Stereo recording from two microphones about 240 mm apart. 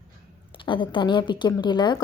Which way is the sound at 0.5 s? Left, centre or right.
Left.